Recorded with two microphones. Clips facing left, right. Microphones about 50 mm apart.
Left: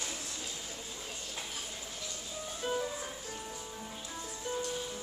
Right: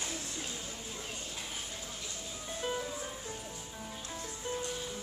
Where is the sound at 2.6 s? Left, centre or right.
Right.